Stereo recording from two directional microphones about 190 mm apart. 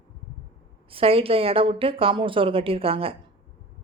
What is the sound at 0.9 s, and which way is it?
Speech, 30° right (ahead or behind).